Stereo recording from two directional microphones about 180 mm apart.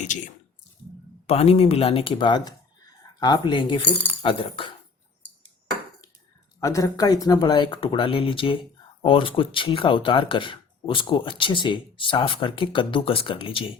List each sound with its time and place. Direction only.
1.3 s speech: 35° left (ahead or behind)
6.6 s speech: 15° left (ahead or behind)